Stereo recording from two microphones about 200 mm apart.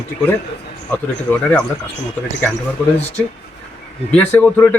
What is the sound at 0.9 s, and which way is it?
Speech, 5° left (ahead or behind).